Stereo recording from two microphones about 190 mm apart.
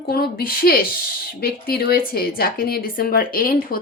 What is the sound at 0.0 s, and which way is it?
Speech, 55° left (ahead or behind).